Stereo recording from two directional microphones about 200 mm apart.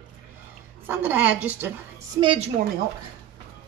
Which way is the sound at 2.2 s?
25° right (ahead or behind).